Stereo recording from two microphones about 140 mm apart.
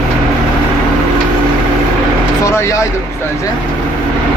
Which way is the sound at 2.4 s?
20° left (ahead or behind).